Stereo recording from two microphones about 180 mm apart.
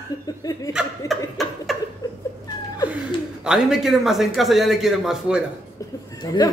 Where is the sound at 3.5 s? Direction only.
Centre (ahead or behind).